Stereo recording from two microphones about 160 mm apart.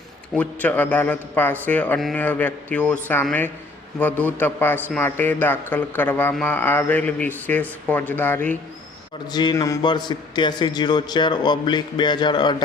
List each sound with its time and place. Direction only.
0.3 s a man's voice: 10° left (ahead or behind)
9.3 s a man's voice: 25° left (ahead or behind)